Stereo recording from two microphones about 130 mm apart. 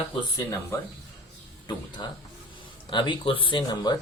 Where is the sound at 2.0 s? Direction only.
35° left (ahead or behind).